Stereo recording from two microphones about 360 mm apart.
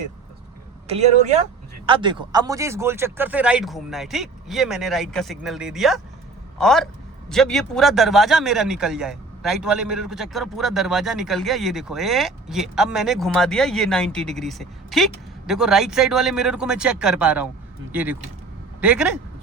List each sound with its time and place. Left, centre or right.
0.9 s a man's voice: centre